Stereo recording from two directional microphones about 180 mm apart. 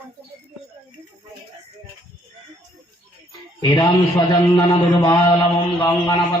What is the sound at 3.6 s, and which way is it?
A man's voice, 20° left (ahead or behind).